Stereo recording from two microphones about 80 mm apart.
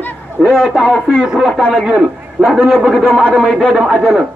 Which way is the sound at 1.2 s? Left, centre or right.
Centre.